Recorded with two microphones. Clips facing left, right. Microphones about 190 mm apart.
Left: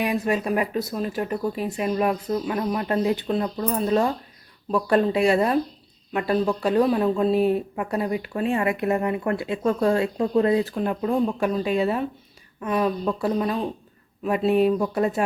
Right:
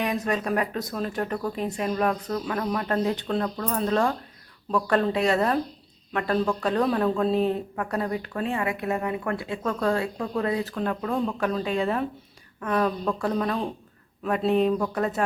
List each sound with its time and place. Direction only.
0.0 s speech: 10° left (ahead or behind)
9.2 s speech: 20° left (ahead or behind)